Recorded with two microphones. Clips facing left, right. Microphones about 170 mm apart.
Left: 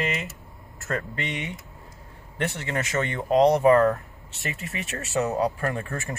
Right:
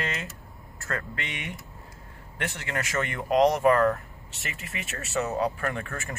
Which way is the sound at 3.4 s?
35° left (ahead or behind).